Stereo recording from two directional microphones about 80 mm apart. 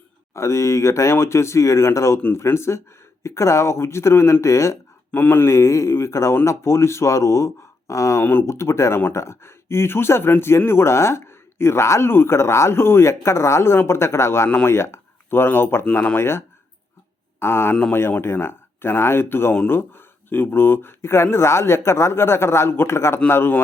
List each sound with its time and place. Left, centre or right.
0.3 s speech: left
5.1 s speech: left
8.2 s speech: left
8.4 s speech: left
17.4 s speech: left